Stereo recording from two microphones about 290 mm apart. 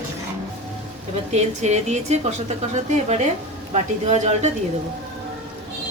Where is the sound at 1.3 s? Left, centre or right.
Right.